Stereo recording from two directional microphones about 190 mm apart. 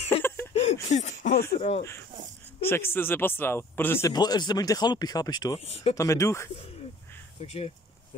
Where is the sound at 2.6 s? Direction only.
10° left (ahead or behind).